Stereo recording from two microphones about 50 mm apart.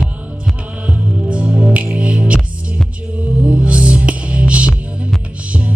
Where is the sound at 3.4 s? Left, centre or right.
Right.